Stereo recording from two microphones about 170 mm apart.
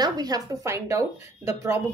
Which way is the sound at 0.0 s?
20° right (ahead or behind).